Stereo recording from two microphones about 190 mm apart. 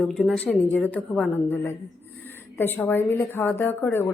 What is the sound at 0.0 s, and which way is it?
A woman's voice, 5° left (ahead or behind).